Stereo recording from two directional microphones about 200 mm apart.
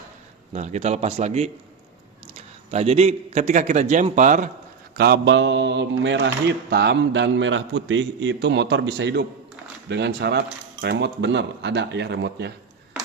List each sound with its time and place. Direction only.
0.5 s a man's voice: 35° right (ahead or behind)
2.7 s a man's voice: 30° right (ahead or behind)
4.9 s speech: 55° right (ahead or behind)